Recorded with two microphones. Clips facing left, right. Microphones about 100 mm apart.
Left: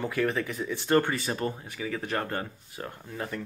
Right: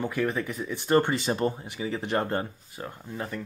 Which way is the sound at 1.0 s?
25° right (ahead or behind).